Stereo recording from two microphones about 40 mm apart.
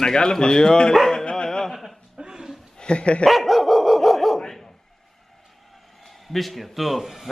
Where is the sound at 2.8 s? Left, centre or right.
Left.